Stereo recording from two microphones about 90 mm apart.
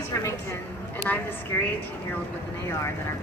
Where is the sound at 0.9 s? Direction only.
20° left (ahead or behind).